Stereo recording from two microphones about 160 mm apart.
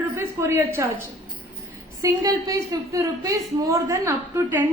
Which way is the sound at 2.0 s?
20° right (ahead or behind).